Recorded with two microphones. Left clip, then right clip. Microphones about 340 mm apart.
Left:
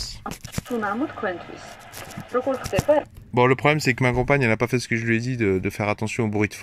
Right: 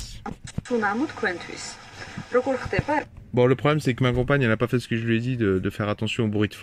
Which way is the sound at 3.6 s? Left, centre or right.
Centre.